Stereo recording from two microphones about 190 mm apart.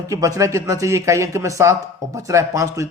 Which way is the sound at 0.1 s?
15° right (ahead or behind).